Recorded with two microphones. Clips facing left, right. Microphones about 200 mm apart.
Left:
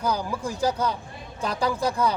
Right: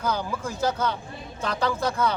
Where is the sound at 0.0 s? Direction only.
15° left (ahead or behind).